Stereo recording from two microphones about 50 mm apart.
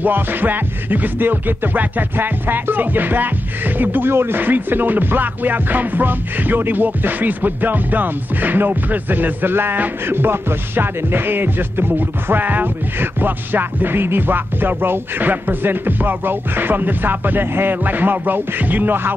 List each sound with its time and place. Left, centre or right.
0.0 s music: right